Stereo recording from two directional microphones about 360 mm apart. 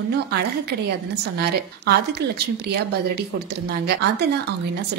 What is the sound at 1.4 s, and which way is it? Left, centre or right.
Speech, right.